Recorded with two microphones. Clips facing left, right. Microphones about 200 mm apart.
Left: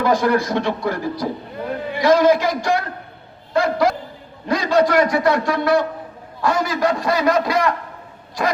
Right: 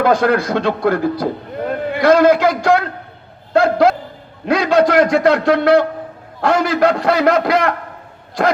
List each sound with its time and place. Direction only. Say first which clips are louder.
0.0 s a man's voice: right 3 dB; 65° right (ahead or behind)